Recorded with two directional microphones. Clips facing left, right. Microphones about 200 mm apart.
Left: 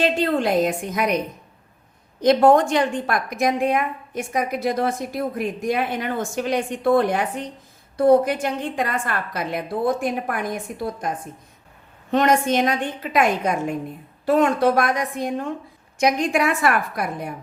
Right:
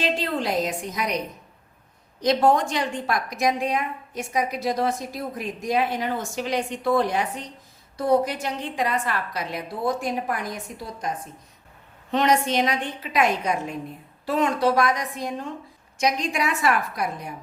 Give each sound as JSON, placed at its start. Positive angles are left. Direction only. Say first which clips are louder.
{"t": 0.0, "sound": "a woman's voice", "louder": "left 5 dB", "side_deg": 55}
{"t": 2.2, "sound": "a woman's voice", "louder": "left 5 dB", "side_deg": 55}
{"t": 12.1, "sound": "a woman's voice", "louder": "left 3 dB", "side_deg": 50}